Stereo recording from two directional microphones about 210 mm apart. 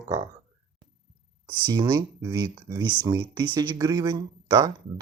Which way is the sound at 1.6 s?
20° right (ahead or behind).